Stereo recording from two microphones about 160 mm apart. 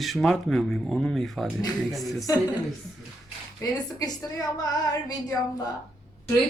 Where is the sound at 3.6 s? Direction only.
25° left (ahead or behind).